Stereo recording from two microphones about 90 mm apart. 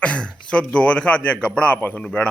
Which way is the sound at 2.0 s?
5° left (ahead or behind).